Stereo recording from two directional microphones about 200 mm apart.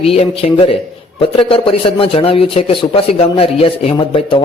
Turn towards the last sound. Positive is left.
turn(degrees=25)  # may be behind; listen again after turning